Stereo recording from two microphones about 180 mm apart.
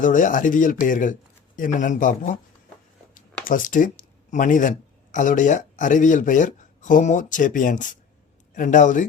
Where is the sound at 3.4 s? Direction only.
50° left (ahead or behind).